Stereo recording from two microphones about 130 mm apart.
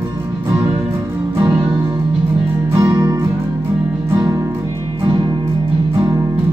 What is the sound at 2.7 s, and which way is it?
Music, 25° right (ahead or behind).